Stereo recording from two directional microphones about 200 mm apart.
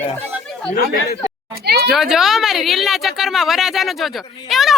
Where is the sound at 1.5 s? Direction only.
50° right (ahead or behind).